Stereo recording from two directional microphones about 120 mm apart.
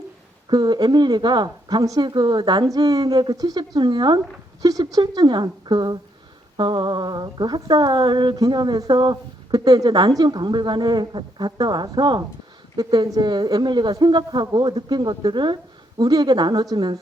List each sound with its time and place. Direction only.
0.5 s speech: 35° right (ahead or behind)